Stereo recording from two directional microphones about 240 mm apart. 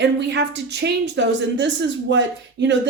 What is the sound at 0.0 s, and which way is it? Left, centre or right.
A woman's voice, right.